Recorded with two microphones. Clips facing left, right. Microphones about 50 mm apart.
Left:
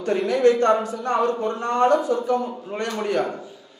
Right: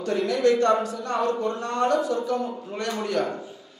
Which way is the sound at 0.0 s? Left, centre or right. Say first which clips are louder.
Left 4 dB; left.